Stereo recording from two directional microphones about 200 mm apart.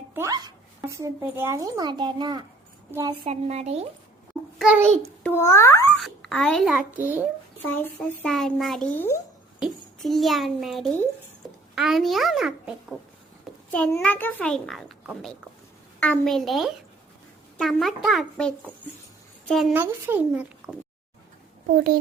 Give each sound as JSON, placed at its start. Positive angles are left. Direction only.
{"t": 0.1, "sound": "a child's voice", "side_deg": -15}
{"t": 3.2, "sound": "speech", "side_deg": -30}
{"t": 4.5, "sound": "a child's voice", "side_deg": -5}
{"t": 5.2, "sound": "a child's voice", "side_deg": 10}
{"t": 6.0, "sound": "a child's voice", "side_deg": 5}
{"t": 8.2, "sound": "a child's voice", "side_deg": 5}
{"t": 9.6, "sound": "a child's voice", "side_deg": 0}
{"t": 19.7, "sound": "a child's voice", "side_deg": -10}